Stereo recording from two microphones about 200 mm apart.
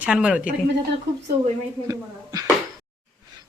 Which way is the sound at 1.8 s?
15° right (ahead or behind).